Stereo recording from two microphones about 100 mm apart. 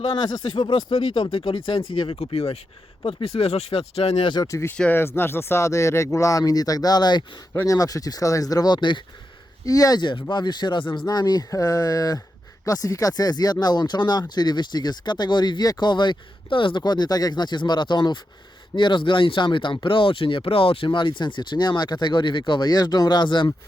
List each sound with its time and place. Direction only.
0.0 s speech: 60° left (ahead or behind); by 2.6 s 85° left
3.0 s speech: 65° left (ahead or behind); by 4.3 s 90° left
4.5 s speech: 25° left (ahead or behind); by 7.3 s 45° left (ahead or behind)
7.5 s speech: 30° left (ahead or behind); by 9.0 s 50° left (ahead or behind)
9.6 s speech: 35° left (ahead or behind)